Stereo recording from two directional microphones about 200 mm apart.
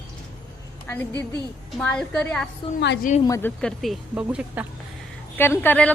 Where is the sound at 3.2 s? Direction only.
15° left (ahead or behind).